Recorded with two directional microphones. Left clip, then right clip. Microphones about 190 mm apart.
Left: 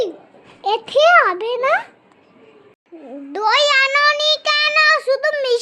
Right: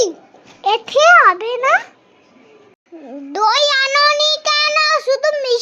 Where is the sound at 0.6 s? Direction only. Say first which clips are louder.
Right 2 dB; centre (ahead or behind).